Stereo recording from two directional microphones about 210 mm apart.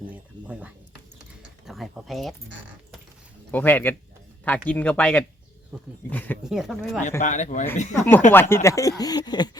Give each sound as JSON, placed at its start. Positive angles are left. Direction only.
{"t": 0.4, "sound": "speech", "side_deg": -5}
{"t": 1.6, "sound": "a sound", "side_deg": 0}
{"t": 3.5, "sound": "speech", "side_deg": 10}
{"t": 5.7, "sound": "speech", "side_deg": -5}
{"t": 6.1, "sound": "speech", "side_deg": 10}
{"t": 6.4, "sound": "speech", "side_deg": 0}
{"t": 7.2, "sound": "speech", "side_deg": 35}
{"t": 7.9, "sound": "speech", "side_deg": 10}